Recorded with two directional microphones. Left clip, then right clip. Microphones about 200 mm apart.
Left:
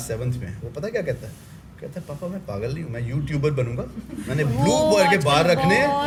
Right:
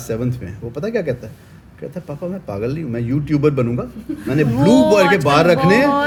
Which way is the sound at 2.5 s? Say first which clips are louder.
Right 8 dB; 50° right (ahead or behind).